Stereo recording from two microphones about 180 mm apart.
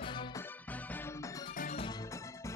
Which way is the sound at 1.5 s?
45° left (ahead or behind).